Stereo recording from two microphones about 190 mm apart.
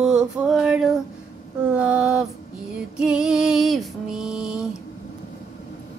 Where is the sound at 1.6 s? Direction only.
5° right (ahead or behind).